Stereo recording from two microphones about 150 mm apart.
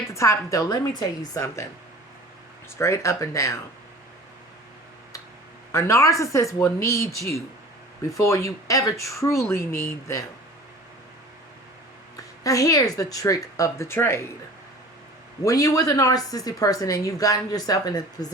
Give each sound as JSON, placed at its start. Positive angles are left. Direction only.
{"t": 0.1, "sound": "a woman's voice", "side_deg": 20}
{"t": 2.6, "sound": "a woman's voice", "side_deg": 15}
{"t": 5.7, "sound": "a woman's voice", "side_deg": 20}
{"t": 12.1, "sound": "a woman's voice", "side_deg": 20}
{"t": 15.4, "sound": "a woman's voice", "side_deg": 20}